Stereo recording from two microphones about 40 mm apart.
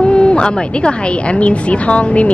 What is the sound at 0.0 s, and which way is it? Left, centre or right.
A woman's voice, left.